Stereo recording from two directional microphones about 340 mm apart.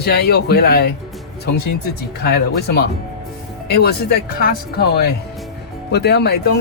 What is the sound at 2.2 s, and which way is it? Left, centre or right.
Speech, left.